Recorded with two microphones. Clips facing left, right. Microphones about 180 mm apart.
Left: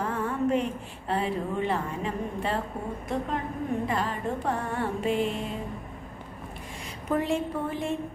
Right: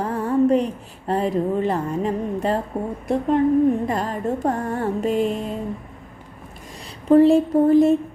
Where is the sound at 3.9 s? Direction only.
45° right (ahead or behind).